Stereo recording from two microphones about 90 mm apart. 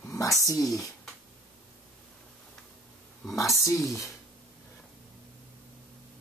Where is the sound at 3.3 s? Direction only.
35° left (ahead or behind).